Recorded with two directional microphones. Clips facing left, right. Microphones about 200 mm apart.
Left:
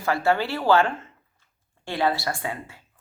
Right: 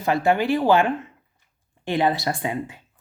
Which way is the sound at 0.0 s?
20° right (ahead or behind).